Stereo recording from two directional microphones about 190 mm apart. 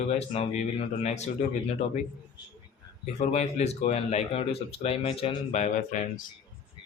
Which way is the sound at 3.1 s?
35° left (ahead or behind).